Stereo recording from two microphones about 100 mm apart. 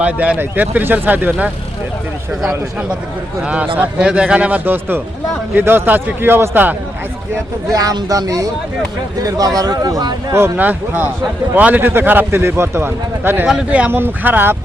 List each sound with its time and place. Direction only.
0.0 s speech: 15° right (ahead or behind)
3.4 s speech: 10° right (ahead or behind)
7.7 s speech: 35° right (ahead or behind)
10.3 s speech: 20° right (ahead or behind)